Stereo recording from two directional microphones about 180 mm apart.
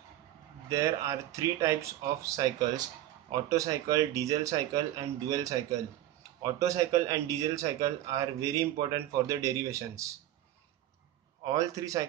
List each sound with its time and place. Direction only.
0.7 s speech: 15° right (ahead or behind)
11.4 s speech: 20° right (ahead or behind)